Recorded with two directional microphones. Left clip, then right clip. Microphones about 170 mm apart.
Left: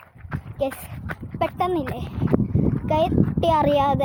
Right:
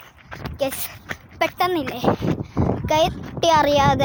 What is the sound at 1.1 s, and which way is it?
A child's voice, 10° right (ahead or behind).